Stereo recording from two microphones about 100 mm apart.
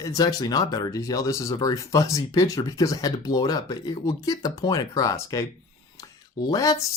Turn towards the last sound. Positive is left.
turn(degrees=40)  # may be behind; listen again after turning